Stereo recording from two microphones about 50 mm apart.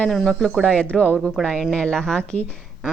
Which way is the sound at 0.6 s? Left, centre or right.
Centre.